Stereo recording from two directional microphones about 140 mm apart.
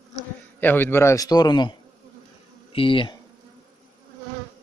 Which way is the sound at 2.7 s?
40° left (ahead or behind).